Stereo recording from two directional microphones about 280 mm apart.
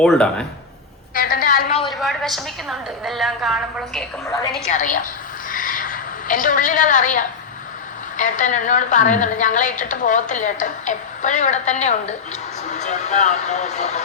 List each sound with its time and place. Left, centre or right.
0.0 s a woman's voice: centre
1.1 s a sound: left
1.9 s a woman's voice: centre
4.7 s a woman's voice: left
5.5 s a sound: left
8.1 s a woman's voice: left